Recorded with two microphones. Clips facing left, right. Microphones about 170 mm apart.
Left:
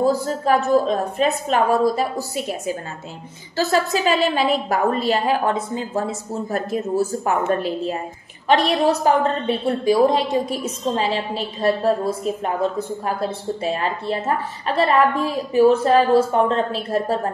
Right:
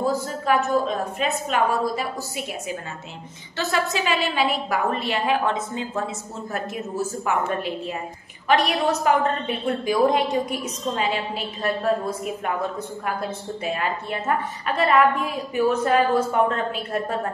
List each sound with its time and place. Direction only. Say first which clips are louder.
0.0 s a woman's voice: left 5 dB; 35° left (ahead or behind)